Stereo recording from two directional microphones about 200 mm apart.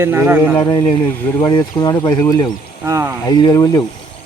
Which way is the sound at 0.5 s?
15° left (ahead or behind).